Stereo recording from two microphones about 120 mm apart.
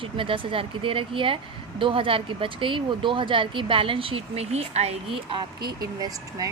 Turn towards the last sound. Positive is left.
turn(degrees=-30)  # may be behind; listen again after turning